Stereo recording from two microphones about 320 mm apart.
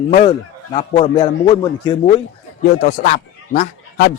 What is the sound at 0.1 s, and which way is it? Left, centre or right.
A man's voice, centre.